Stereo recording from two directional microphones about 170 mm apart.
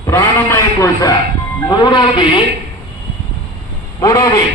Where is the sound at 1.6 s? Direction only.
30° left (ahead or behind).